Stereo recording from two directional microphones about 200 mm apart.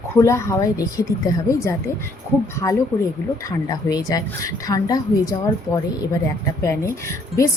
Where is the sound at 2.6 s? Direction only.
15° left (ahead or behind).